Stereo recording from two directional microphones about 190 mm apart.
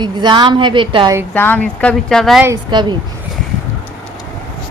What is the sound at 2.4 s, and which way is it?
Speech, 20° right (ahead or behind).